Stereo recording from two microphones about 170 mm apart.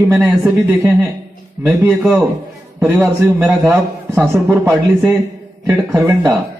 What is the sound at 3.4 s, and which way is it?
A man's voice, 15° right (ahead or behind).